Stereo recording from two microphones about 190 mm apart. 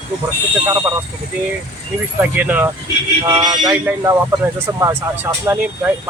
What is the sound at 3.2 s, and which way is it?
Speech, 20° right (ahead or behind).